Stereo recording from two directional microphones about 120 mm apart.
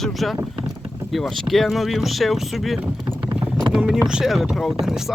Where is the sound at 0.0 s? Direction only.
Centre (ahead or behind).